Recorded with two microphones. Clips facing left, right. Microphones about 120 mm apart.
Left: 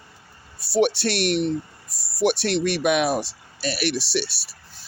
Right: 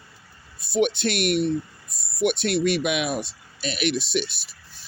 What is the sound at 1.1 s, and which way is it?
Speech, 35° left (ahead or behind).